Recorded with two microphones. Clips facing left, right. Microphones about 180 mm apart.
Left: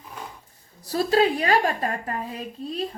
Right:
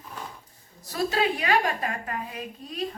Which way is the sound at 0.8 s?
35° left (ahead or behind).